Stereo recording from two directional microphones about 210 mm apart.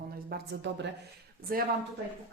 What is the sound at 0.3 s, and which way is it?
Speech, 55° right (ahead or behind).